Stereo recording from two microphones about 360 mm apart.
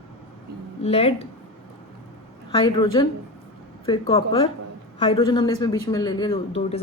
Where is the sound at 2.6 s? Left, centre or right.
Centre.